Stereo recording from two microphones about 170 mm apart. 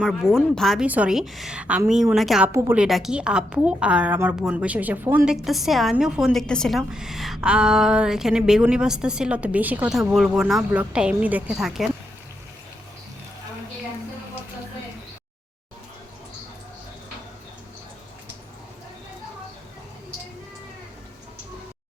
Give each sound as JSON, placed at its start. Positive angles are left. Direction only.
{"t": 0.0, "sound": "a woman's voice", "side_deg": 0}
{"t": 2.5, "sound": "a woman's voice", "side_deg": -15}
{"t": 2.7, "sound": "a woman's voice", "side_deg": -5}